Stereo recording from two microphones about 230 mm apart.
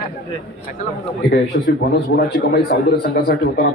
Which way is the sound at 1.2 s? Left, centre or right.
Left.